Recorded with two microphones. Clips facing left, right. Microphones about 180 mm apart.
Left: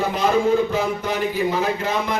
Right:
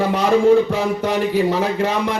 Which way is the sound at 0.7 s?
75° right (ahead or behind).